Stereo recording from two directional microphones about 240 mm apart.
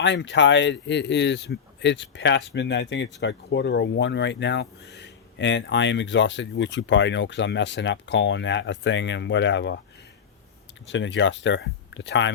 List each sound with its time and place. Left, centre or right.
0.0 s speech: left
10.8 s speech: left